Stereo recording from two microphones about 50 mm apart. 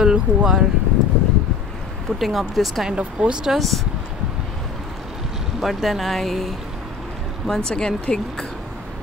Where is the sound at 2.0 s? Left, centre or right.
Centre.